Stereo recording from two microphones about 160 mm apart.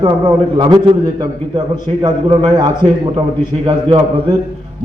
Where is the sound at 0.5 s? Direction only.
25° right (ahead or behind).